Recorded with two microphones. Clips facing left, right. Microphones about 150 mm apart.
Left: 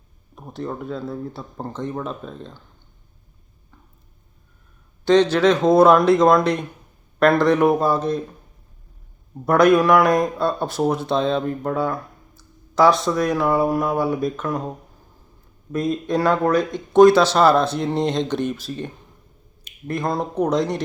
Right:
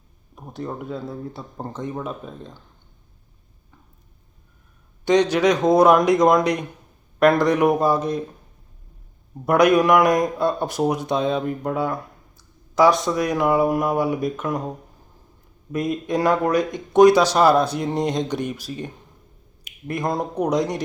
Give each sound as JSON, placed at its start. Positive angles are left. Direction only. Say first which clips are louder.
{"t": 0.5, "sound": "speech", "louder": "left 1 dB", "side_deg": -10}
{"t": 5.0, "sound": "speech", "louder": "left 2 dB", "side_deg": -15}
{"t": 9.5, "sound": "speech", "louder": "left 1 dB", "side_deg": -15}
{"t": 15.7, "sound": "speech", "louder": "left 1 dB", "side_deg": -15}
{"t": 19.9, "sound": "speech", "louder": "left 1 dB", "side_deg": -15}